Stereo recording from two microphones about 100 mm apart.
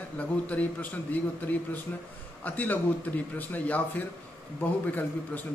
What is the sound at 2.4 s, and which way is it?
A man's voice, 15° left (ahead or behind).